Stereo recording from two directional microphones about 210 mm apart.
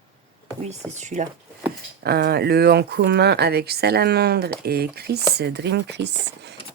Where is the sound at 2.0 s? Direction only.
50° right (ahead or behind).